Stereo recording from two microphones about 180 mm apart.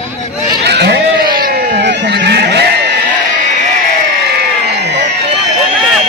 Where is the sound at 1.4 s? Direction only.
65° right (ahead or behind).